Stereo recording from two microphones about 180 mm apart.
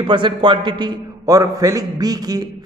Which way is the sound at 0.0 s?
25° right (ahead or behind).